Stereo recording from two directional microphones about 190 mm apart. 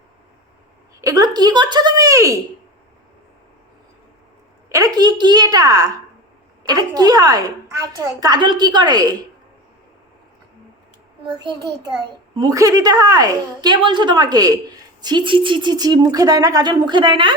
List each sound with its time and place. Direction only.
1.0 s speech: 20° right (ahead or behind)
4.7 s a woman's voice: 20° right (ahead or behind)
11.3 s a woman's voice: 20° right (ahead or behind)